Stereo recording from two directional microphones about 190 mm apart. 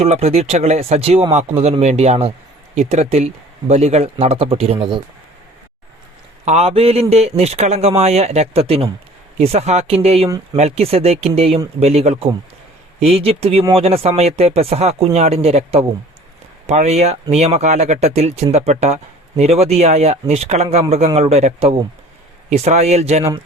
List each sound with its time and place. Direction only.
0.0 s speech: 35° right (ahead or behind)
6.4 s speech: 35° right (ahead or behind)
10.2 s speech: 20° right (ahead or behind)
10.6 s speech: 35° right (ahead or behind)